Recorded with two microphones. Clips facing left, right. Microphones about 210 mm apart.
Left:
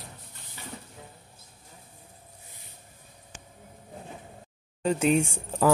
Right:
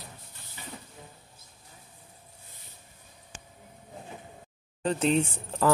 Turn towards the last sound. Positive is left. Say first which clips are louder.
# left 2 dB
turn(degrees=10)  # may be behind; listen again after turning